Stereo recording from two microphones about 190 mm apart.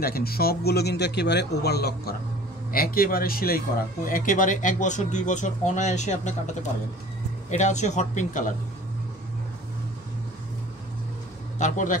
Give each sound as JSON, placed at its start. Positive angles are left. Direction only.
{"t": 0.0, "sound": "speech", "side_deg": 50}
{"t": 7.5, "sound": "speech", "side_deg": 40}
{"t": 11.5, "sound": "a man's voice", "side_deg": 40}